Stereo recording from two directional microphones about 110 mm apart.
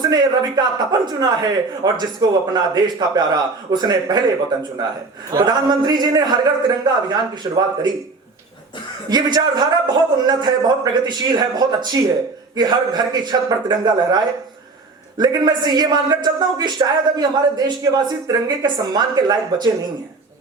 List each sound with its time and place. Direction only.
0.1 s speech: 40° right (ahead or behind)
9.0 s speech: 40° right (ahead or behind)
15.2 s speech: 40° right (ahead or behind)